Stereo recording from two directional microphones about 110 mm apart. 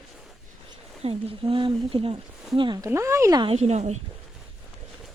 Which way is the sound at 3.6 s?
85° right.